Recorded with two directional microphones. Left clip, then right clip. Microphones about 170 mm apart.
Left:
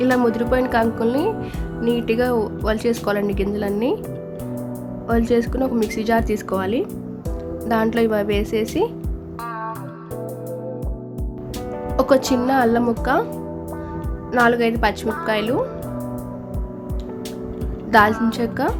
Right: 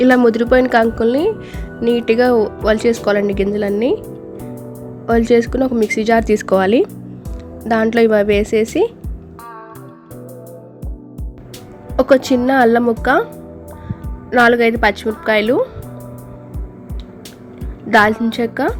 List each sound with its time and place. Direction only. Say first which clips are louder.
0.0 s a woman's voice: right 7 dB; 25° right (ahead or behind)
5.0 s a woman's voice: right 6 dB; 25° right (ahead or behind)
7.7 s a woman's voice: right 6 dB; 20° right (ahead or behind)
11.9 s a woman's voice: right 5 dB; 15° right (ahead or behind)
14.3 s a woman's voice: right 6 dB; 20° right (ahead or behind)
17.9 s speech: right 3 dB; 15° right (ahead or behind)